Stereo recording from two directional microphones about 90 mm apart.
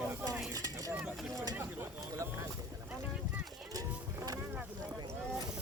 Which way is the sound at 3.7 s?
45° right (ahead or behind).